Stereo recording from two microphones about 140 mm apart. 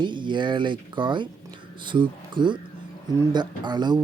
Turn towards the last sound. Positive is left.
turn(degrees=-30)  # may be behind; listen again after turning